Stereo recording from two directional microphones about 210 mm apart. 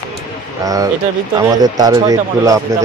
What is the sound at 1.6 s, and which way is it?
Speech, 20° right (ahead or behind).